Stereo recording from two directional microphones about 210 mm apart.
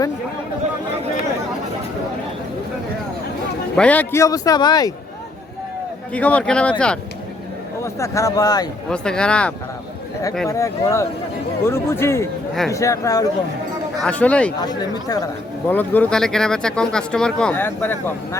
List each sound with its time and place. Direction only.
3.8 s a man's voice: 5° left (ahead or behind)
6.1 s a man's voice: 5° left (ahead or behind)
8.9 s speech: 5° left (ahead or behind)
10.5 s a man's voice: 15° left (ahead or behind)
14.6 s speech: 20° left (ahead or behind)